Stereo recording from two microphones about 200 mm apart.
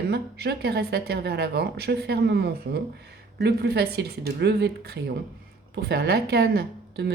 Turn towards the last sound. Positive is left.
turn(degrees=-55)  # may be behind; listen again after turning